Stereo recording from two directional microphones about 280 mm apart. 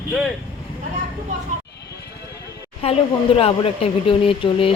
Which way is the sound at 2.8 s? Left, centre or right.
Left.